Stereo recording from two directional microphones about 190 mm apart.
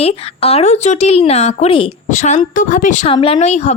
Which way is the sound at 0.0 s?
30° left (ahead or behind).